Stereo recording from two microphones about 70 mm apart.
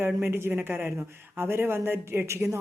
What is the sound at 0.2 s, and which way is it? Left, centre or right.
Speech, right.